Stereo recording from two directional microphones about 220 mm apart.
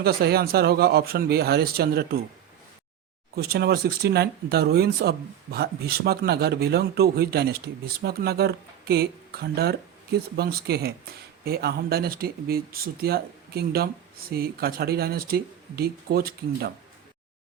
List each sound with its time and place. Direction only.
0.0 s speech: 45° right (ahead or behind)
3.3 s speech: 45° right (ahead or behind)